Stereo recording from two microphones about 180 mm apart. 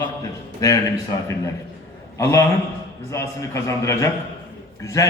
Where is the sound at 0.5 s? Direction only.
20° left (ahead or behind).